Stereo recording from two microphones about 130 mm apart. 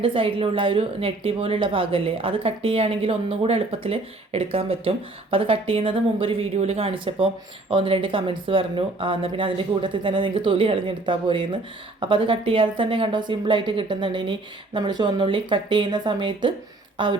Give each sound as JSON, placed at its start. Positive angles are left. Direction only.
{"t": 0.0, "sound": "speech", "side_deg": -45}